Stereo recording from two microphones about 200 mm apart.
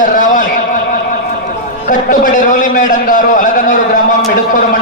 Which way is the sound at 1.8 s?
40° left (ahead or behind).